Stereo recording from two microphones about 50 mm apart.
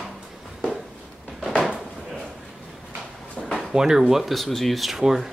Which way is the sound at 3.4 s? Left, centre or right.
Centre.